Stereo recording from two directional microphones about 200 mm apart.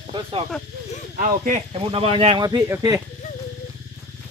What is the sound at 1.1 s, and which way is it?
Speech, 40° right (ahead or behind).